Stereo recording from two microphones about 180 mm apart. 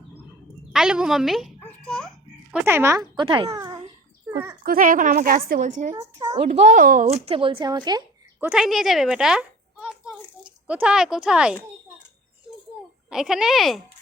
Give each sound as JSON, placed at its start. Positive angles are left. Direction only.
{"t": 0.7, "sound": "a woman's voice", "side_deg": -5}
{"t": 1.6, "sound": "a sound", "side_deg": 5}
{"t": 2.5, "sound": "a child's voice", "side_deg": -10}
{"t": 4.6, "sound": "a woman's voice", "side_deg": -50}
{"t": 6.0, "sound": "a woman's voice", "side_deg": -20}
{"t": 6.3, "sound": "a child's voice", "side_deg": -40}
{"t": 7.1, "sound": "a child's voice", "side_deg": -30}
{"t": 8.4, "sound": "a sound", "side_deg": -5}
{"t": 10.7, "sound": "speech", "side_deg": -5}
{"t": 13.1, "sound": "speech", "side_deg": -5}